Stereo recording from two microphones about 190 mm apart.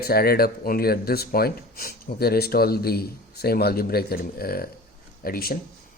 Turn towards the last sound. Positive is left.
turn(degrees=50)  # may be behind; listen again after turning